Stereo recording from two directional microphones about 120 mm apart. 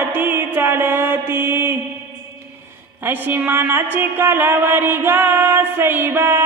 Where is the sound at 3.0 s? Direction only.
15° right (ahead or behind).